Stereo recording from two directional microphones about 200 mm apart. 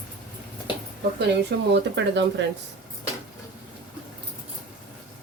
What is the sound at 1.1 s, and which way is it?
Speech, 60° right (ahead or behind).